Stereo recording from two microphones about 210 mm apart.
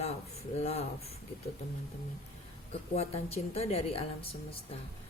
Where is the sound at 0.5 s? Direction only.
30° left (ahead or behind).